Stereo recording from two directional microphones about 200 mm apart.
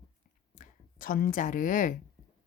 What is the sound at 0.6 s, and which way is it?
A woman's voice, 45° left (ahead or behind).